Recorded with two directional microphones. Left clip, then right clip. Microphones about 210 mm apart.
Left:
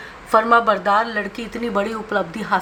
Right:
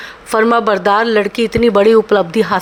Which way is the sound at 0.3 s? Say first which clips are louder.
Right 3 dB; 40° right (ahead or behind).